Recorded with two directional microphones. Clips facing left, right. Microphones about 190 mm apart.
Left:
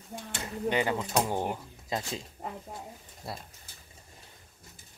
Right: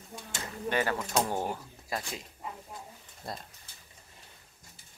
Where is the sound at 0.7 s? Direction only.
15° left (ahead or behind).